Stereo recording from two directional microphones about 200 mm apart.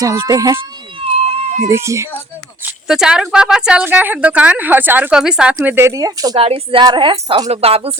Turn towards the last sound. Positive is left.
turn(degrees=-30)  # may be behind; listen again after turning